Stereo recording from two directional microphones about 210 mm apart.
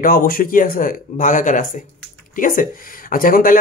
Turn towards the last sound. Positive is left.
turn(degrees=40)  # may be behind; listen again after turning